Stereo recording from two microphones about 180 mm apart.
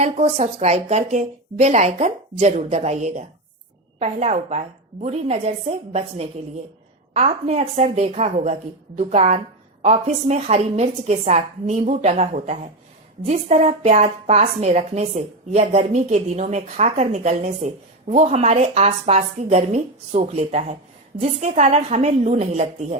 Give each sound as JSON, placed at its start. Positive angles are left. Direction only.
{"t": 0.0, "sound": "a woman's voice", "side_deg": -40}